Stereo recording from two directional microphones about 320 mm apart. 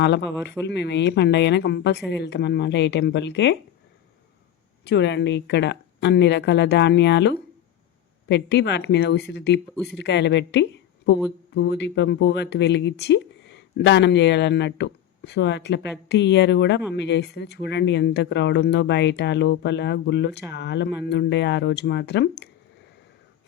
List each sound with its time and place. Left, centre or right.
0.0 s speech: left
4.9 s speech: left